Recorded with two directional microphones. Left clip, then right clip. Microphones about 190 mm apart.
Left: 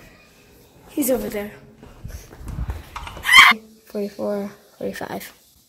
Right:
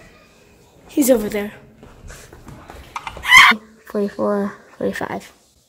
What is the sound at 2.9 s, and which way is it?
Chicken, 40° right (ahead or behind).